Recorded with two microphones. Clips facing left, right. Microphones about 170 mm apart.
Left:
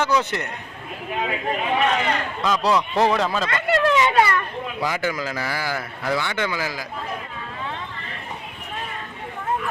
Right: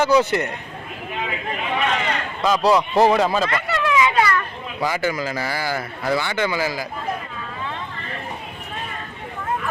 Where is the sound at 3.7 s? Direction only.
30° left (ahead or behind).